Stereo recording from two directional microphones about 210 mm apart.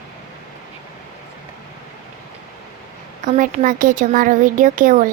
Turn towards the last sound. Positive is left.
turn(degrees=-40)  # may be behind; listen again after turning